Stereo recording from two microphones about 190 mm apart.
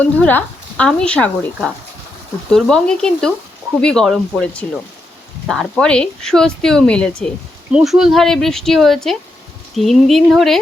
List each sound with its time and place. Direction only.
0.0 s speech: 10° left (ahead or behind)